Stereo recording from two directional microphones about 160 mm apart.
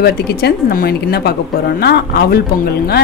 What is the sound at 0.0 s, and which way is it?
A woman's voice, 80° left.